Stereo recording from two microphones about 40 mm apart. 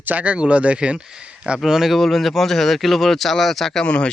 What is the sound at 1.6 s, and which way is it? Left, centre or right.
Speech, centre.